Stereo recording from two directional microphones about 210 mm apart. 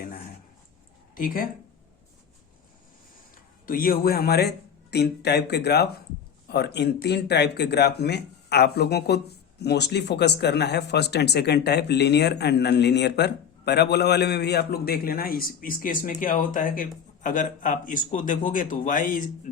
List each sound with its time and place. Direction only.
1.1 s speech: 40° left (ahead or behind)
3.3 s speech: 45° left (ahead or behind)